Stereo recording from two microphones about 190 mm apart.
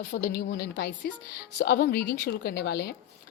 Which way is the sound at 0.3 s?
55° left (ahead or behind).